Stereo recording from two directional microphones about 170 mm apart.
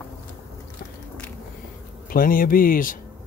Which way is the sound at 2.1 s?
55° left (ahead or behind).